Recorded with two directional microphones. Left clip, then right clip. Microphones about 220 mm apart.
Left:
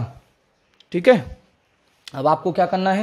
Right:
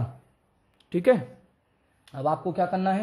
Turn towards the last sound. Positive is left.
turn(degrees=45)  # may be behind; listen again after turning